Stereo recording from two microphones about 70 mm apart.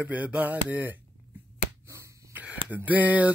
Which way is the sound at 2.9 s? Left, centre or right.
Right.